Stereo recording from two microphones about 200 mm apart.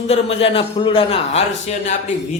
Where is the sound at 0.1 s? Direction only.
30° left (ahead or behind).